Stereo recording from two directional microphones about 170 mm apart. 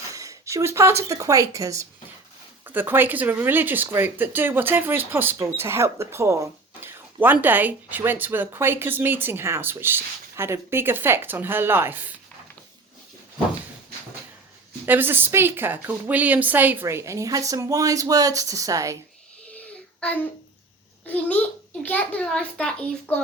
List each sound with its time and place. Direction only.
0.1 s speech: 20° right (ahead or behind)
14.8 s speech: 10° right (ahead or behind)
19.5 s child singing: 10° left (ahead or behind)
21.8 s a child's voice: 10° left (ahead or behind)